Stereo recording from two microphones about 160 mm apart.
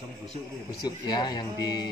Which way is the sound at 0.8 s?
25° left (ahead or behind).